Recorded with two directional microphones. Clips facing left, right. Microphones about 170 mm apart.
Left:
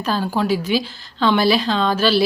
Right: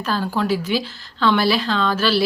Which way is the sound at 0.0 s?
15° left (ahead or behind).